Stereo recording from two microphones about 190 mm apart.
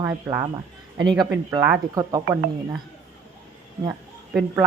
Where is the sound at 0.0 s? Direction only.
15° right (ahead or behind).